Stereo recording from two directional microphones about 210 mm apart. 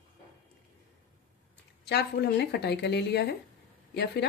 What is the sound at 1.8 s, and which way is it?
A woman's voice, 50° left (ahead or behind).